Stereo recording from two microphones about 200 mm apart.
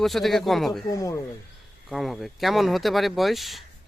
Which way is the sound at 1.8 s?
Centre (ahead or behind).